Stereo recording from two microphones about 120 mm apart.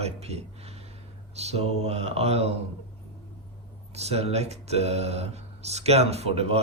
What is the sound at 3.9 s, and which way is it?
Speech, 60° right (ahead or behind).